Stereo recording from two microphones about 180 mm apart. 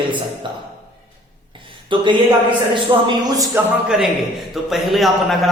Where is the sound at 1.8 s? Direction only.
25° right (ahead or behind).